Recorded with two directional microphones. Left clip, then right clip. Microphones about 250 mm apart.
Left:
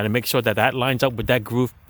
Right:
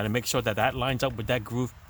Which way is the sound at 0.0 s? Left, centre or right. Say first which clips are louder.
Left 7 dB; left.